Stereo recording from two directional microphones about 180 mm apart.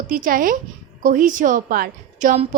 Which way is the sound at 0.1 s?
50° right (ahead or behind).